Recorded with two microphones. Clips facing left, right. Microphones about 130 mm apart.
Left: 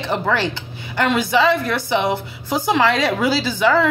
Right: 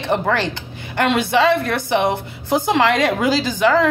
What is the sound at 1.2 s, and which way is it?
A woman's voice, 60° right (ahead or behind).